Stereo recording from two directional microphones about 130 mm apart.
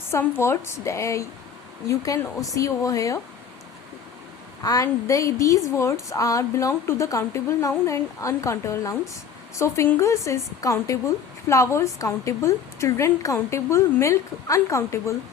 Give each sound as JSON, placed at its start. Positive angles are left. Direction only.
{"t": 0.1, "sound": "a woman's voice", "side_deg": 20}
{"t": 4.6, "sound": "a woman's voice", "side_deg": 25}